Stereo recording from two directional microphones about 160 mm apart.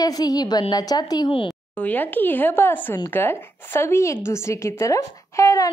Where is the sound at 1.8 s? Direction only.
10° left (ahead or behind).